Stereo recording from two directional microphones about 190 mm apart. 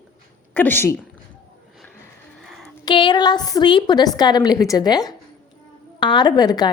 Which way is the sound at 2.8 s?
25° left (ahead or behind).